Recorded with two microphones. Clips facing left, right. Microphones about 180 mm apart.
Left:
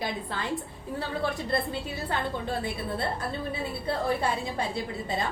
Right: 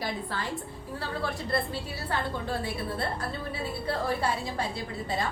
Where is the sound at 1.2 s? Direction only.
20° left (ahead or behind).